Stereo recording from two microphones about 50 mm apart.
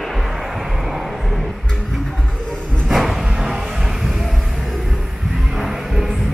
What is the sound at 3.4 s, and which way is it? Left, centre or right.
Music, centre.